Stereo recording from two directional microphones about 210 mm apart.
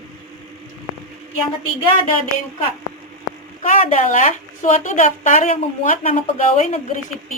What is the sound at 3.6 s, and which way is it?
Speech, 35° left (ahead or behind).